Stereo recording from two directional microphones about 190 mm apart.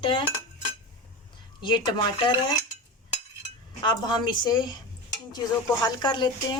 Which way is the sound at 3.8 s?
20° left (ahead or behind).